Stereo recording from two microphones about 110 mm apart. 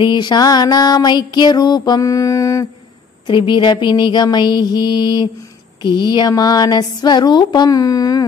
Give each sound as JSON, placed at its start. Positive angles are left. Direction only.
{"t": 0.0, "sound": "music", "side_deg": 40}
{"t": 3.3, "sound": "music", "side_deg": 45}